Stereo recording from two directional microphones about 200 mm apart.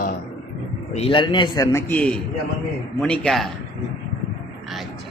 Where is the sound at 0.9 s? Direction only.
25° left (ahead or behind); by 3.5 s centre (ahead or behind).